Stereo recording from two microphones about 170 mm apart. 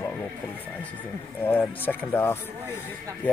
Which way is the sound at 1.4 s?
10° left (ahead or behind).